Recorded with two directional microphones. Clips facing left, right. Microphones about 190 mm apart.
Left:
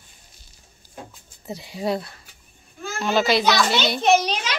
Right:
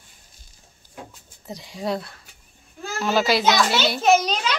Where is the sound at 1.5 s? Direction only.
5° left (ahead or behind).